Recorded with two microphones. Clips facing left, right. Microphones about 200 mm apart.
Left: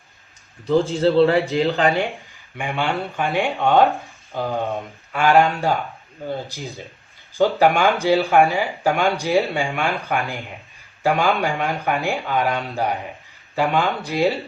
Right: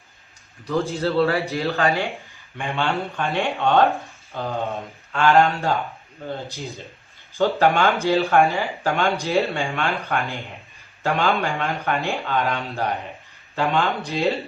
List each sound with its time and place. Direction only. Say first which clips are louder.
0.9 s a man's voice: left 5 dB; 25° left (ahead or behind)
3.8 s speech: even; centre (ahead or behind)
4.3 s speech: left 3 dB; 15° left (ahead or behind)
7.3 s speech: left 2 dB; 15° left (ahead or behind)